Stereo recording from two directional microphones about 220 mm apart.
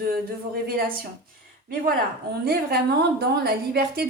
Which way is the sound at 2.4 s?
45° right (ahead or behind).